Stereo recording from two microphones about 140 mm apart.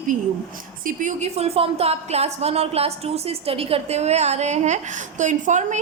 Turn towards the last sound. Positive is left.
turn(degrees=-60)  # may be behind; listen again after turning